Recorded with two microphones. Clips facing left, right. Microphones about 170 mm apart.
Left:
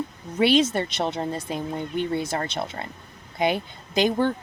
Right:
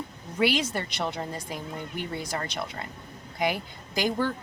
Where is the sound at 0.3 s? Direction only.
25° left (ahead or behind).